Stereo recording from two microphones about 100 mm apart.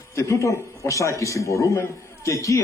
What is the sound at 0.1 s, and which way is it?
A man's voice, 30° left (ahead or behind).